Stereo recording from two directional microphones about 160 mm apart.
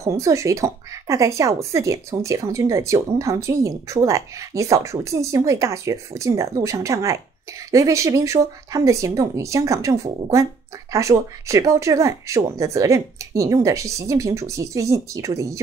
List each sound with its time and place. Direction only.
0.0 s speech: 20° right (ahead or behind)